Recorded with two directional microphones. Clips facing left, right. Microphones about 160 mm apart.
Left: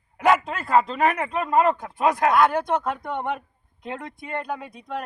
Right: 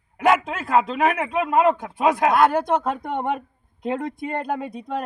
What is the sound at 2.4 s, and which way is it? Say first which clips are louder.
Speech: right 2 dB; 30° right (ahead or behind).